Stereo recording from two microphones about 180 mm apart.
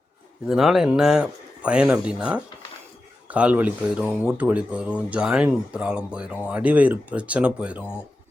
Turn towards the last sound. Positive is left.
turn(degrees=-5)  # may be behind; listen again after turning